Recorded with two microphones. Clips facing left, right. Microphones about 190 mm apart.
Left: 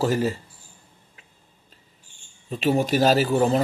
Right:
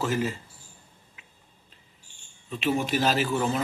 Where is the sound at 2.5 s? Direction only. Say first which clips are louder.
Left 5 dB; 40° left (ahead or behind).